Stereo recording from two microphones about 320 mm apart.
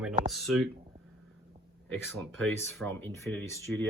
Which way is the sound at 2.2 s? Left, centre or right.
Centre.